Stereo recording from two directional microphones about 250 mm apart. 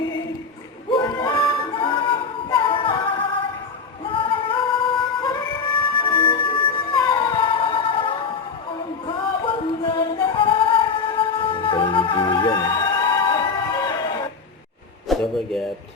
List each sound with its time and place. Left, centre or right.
0.9 s music: centre
4.0 s yodeling: left
9.0 s music: left
15.1 s a sound: centre